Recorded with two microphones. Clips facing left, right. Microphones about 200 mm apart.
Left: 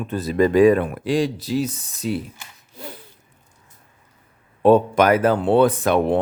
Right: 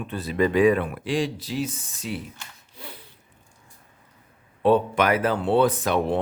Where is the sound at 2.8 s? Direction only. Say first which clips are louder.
Left 6 dB; 45° left (ahead or behind).